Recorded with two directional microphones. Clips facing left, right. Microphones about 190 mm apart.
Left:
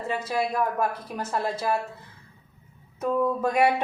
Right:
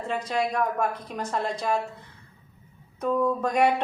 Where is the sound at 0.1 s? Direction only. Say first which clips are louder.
Even; 5° left (ahead or behind).